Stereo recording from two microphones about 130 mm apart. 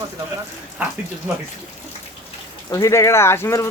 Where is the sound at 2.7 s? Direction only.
25° left (ahead or behind).